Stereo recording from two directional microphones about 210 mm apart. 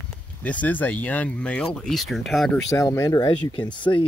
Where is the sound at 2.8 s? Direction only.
15° left (ahead or behind).